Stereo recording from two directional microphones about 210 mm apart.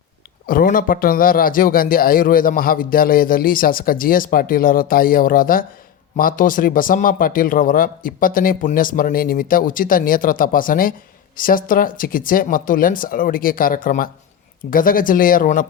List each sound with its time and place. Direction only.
0.4 s a man's voice: 40° left (ahead or behind)